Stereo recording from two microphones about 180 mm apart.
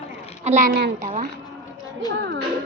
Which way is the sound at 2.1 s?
85° right.